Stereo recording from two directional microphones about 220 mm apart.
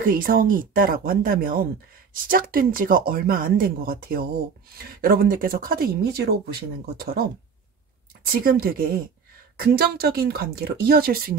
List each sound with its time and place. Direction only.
0.0 s speech: 40° right (ahead or behind)
8.3 s speech: 40° right (ahead or behind)